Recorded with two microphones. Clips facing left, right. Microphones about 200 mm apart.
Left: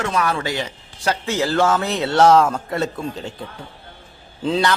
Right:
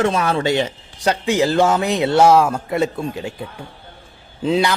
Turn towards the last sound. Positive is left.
turn(degrees=-15)  # may be behind; listen again after turning